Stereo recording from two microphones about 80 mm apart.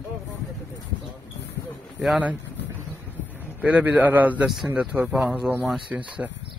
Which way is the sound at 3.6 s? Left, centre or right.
Centre.